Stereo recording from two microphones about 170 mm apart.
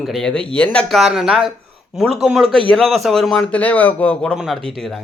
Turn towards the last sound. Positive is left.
turn(degrees=0)  # may be behind; listen again after turning